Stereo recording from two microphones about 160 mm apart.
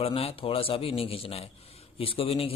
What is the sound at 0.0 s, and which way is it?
A man's voice, 35° left (ahead or behind).